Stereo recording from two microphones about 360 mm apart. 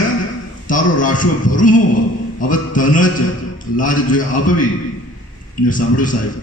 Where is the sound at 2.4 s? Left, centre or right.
Left.